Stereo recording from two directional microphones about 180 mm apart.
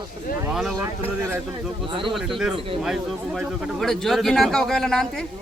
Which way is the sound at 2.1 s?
Centre (ahead or behind).